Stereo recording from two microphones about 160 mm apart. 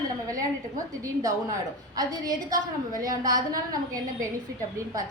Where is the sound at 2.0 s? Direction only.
25° right (ahead or behind).